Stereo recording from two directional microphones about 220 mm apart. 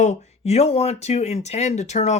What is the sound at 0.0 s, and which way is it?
Speech, 30° left (ahead or behind).